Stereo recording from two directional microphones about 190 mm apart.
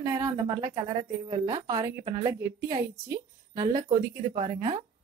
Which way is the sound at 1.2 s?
25° right (ahead or behind).